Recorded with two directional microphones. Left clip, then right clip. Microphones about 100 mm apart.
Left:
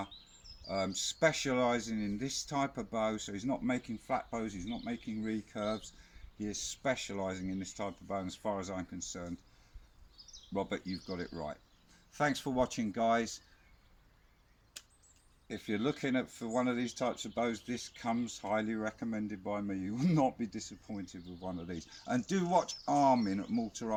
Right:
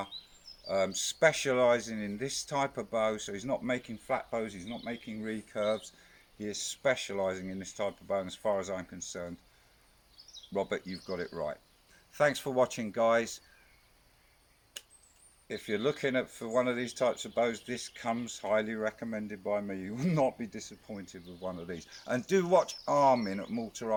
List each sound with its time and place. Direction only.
0.9 s speech: 50° right (ahead or behind)
10.5 s speech: 45° right (ahead or behind)
15.4 s speech: 50° right (ahead or behind)